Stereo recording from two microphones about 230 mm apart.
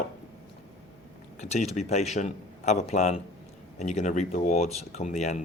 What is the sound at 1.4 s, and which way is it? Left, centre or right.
Speech, left.